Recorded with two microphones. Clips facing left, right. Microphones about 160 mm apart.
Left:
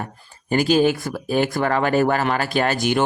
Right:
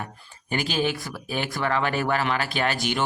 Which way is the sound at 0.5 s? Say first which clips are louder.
Left 9 dB; 40° left (ahead or behind).